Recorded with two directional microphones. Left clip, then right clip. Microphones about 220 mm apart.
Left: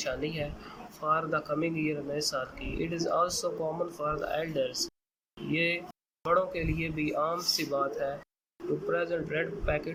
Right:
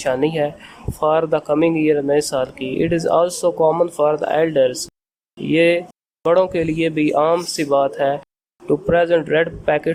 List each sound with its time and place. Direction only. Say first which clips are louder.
0.0 s speech: right 15 dB; 35° right (ahead or behind)